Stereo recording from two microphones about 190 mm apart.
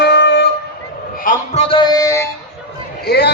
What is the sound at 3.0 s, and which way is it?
Speech, 60° left (ahead or behind).